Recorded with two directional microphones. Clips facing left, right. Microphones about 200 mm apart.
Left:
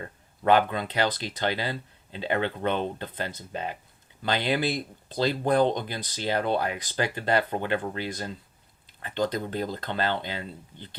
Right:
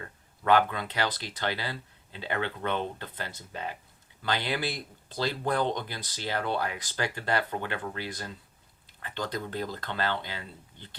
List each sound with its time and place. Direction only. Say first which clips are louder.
0.0 s speech: left 6 dB; 25° left (ahead or behind)